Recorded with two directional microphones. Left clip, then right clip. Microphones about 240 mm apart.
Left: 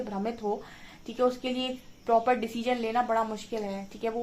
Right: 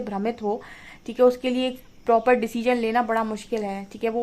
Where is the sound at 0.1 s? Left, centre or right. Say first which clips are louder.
Right 8 dB; right.